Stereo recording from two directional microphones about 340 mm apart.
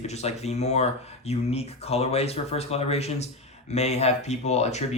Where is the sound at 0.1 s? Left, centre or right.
Centre.